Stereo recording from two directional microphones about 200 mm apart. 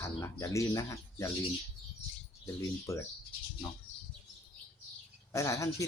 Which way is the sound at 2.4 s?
15° left (ahead or behind).